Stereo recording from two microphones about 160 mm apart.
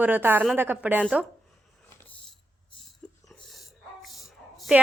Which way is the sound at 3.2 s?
Centre (ahead or behind).